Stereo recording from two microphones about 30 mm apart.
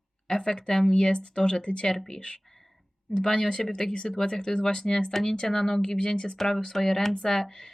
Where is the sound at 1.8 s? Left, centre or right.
Centre.